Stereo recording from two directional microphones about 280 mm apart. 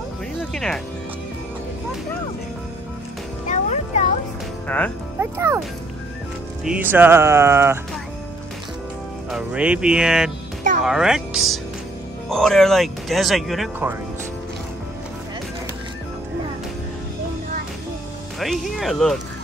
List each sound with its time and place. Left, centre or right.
0.4 s speech: centre
3.4 s music: left
4.6 s speech: centre
5.2 s speech: centre
6.6 s speech: centre
9.3 s speech: centre
18.4 s speech: centre